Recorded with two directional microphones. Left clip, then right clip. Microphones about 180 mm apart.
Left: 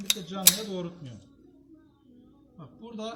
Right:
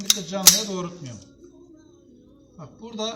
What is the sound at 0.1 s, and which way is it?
Speech, 5° right (ahead or behind).